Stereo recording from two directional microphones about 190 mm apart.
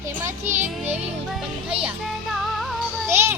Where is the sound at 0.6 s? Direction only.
10° right (ahead or behind).